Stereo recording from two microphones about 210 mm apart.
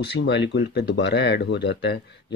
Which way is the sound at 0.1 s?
55° left (ahead or behind).